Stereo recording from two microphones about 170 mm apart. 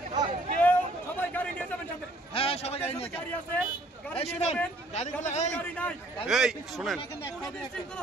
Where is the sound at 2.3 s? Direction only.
35° left (ahead or behind).